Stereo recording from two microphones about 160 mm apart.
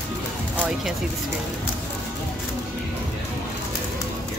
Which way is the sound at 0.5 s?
10° right (ahead or behind).